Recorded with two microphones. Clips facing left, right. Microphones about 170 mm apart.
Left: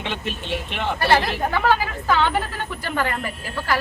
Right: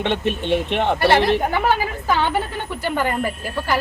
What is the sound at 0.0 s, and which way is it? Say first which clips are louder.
Speech: right 8 dB; 60° right (ahead or behind).